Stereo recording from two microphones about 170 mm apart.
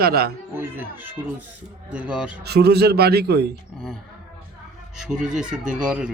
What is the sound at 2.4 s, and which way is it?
Speech, 70° right (ahead or behind).